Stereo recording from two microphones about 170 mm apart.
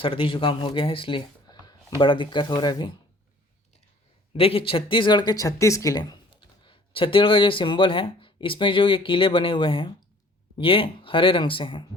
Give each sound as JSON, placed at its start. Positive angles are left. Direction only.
{"t": 0.0, "sound": "speech", "side_deg": 30}
{"t": 4.4, "sound": "speech", "side_deg": 35}